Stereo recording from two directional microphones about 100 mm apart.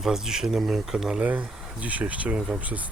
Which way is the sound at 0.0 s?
5° right (ahead or behind).